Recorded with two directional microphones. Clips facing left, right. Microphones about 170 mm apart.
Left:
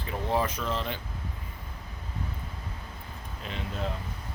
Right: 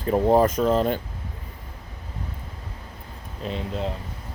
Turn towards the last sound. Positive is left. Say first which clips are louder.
# right 7 dB
turn(degrees=-35)  # may be behind; listen again after turning